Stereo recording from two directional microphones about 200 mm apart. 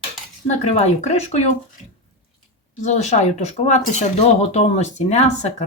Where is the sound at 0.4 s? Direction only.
30° left (ahead or behind).